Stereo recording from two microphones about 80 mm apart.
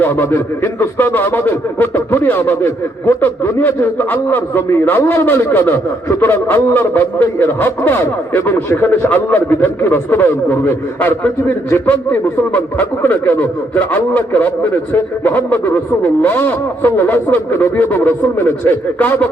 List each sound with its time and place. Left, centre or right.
0.0 s speech: left